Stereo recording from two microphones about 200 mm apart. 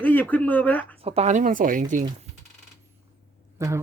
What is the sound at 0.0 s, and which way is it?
Speech, 10° left (ahead or behind).